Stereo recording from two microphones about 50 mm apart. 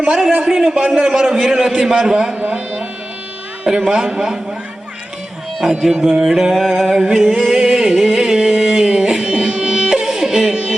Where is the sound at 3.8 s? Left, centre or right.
Centre.